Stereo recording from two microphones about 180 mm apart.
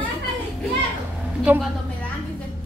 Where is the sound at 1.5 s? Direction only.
10° right (ahead or behind).